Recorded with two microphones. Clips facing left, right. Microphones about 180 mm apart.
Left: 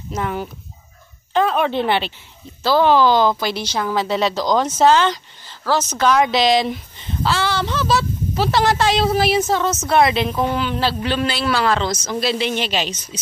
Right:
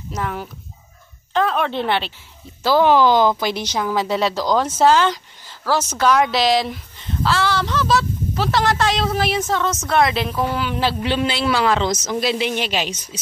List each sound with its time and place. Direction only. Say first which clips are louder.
0.1 s speech: left 2 dB; centre (ahead or behind)
2.6 s a woman's voice: even; 15° right (ahead or behind); by 10.3 s centre (ahead or behind)
10.5 s a woman's voice: left 1 dB; 10° right (ahead or behind)